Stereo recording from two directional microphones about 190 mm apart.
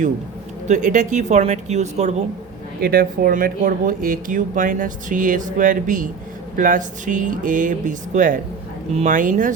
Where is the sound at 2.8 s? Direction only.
55° right (ahead or behind).